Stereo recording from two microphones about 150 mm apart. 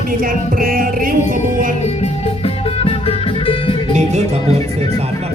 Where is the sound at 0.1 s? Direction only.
65° right (ahead or behind).